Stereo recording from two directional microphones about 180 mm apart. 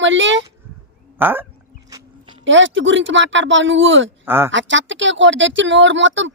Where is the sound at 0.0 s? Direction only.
90° right.